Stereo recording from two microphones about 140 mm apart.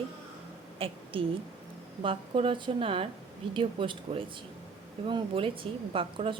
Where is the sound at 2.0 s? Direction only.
40° right (ahead or behind).